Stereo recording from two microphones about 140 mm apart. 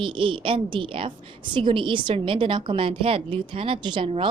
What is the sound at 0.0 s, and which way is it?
A woman's voice, 40° right (ahead or behind).